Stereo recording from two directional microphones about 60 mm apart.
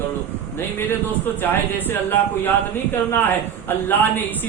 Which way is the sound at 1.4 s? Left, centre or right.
Left.